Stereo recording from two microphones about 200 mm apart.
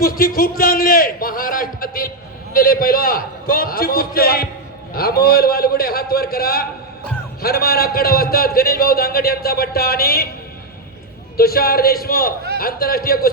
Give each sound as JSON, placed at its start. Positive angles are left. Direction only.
{"t": 0.0, "sound": "a man's voice", "side_deg": 45}
{"t": 11.3, "sound": "a man's voice", "side_deg": 50}